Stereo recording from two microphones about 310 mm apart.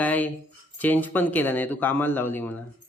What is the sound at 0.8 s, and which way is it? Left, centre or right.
Speech, centre.